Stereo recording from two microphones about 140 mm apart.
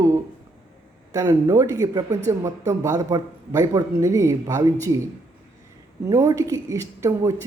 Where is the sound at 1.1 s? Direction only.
25° right (ahead or behind).